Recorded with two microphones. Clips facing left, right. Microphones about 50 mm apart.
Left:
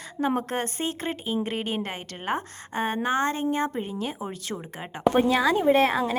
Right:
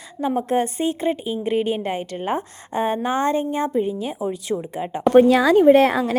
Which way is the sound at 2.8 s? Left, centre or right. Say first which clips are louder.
Right 3 dB; left.